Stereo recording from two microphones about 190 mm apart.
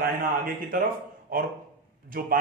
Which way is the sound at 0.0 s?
50° right (ahead or behind).